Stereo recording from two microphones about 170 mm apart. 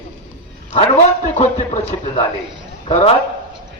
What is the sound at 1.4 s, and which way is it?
A man's voice, 40° left (ahead or behind).